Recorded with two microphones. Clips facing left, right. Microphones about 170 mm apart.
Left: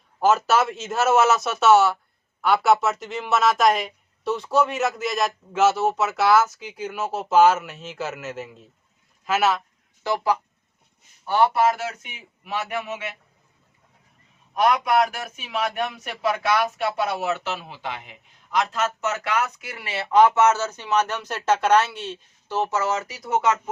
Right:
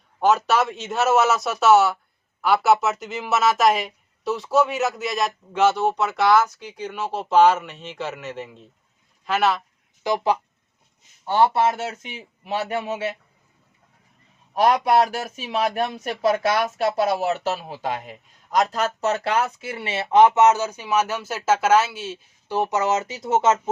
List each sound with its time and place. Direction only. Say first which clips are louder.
0.2 s speech: even; centre (ahead or behind)
10.0 s speech: right 1 dB; 15° right (ahead or behind)
14.5 s speech: right 2 dB; 35° right (ahead or behind)